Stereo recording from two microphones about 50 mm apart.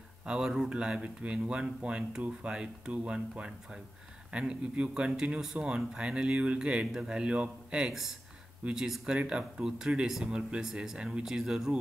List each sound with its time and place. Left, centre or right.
0.3 s speech: centre
7.9 s speech: centre